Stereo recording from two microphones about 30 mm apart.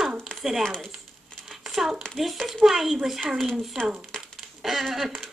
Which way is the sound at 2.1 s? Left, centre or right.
Centre.